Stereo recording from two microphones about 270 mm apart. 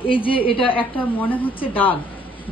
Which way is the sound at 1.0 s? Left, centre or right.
Centre.